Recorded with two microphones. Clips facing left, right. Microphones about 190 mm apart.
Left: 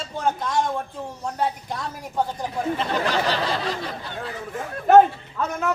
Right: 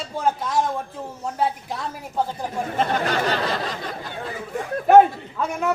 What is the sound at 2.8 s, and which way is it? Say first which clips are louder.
Speech: right 5 dB; 50° right (ahead or behind).